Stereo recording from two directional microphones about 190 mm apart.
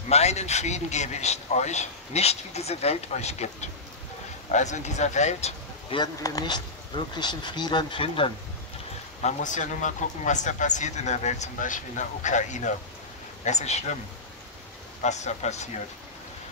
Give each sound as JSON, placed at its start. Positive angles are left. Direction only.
{"t": 0.1, "sound": "speech", "side_deg": 35}
{"t": 6.2, "sound": "speech", "side_deg": 20}
{"t": 9.2, "sound": "speech", "side_deg": 40}
{"t": 15.0, "sound": "speech", "side_deg": 35}